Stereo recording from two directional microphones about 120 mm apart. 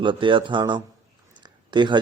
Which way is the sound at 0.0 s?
40° right (ahead or behind).